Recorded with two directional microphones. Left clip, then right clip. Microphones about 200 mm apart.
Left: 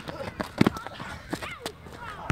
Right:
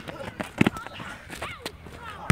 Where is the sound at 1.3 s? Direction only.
25° right (ahead or behind).